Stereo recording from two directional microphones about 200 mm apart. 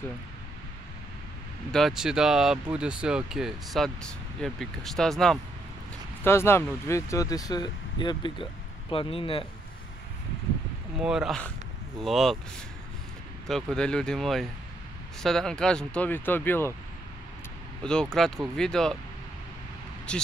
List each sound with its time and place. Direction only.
1.7 s speech: centre (ahead or behind)
6.2 s speech: 10° left (ahead or behind)
11.0 s speech: 5° right (ahead or behind)
13.5 s speech: centre (ahead or behind)
17.8 s speech: 5° left (ahead or behind)
20.1 s speech: 5° left (ahead or behind)